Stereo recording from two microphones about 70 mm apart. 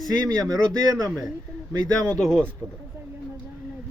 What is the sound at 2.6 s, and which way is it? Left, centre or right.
Speech, right.